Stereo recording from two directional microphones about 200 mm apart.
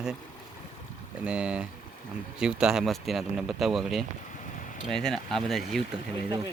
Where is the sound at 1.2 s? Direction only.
5° right (ahead or behind).